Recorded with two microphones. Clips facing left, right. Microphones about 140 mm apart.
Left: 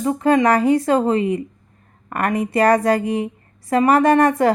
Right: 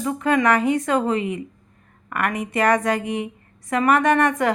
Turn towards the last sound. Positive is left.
turn(degrees=35)  # may be behind; listen again after turning